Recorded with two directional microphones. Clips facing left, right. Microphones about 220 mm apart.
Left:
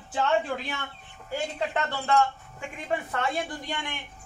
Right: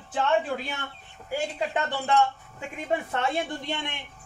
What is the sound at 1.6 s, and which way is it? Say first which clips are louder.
Speech: right 1 dB; 15° right (ahead or behind).